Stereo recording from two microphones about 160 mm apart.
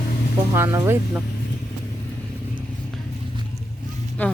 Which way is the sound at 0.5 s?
15° right (ahead or behind).